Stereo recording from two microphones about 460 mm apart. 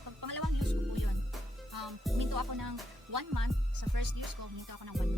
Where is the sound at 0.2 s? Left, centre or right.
Right.